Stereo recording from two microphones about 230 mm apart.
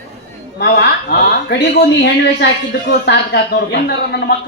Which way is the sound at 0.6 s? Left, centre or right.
Left.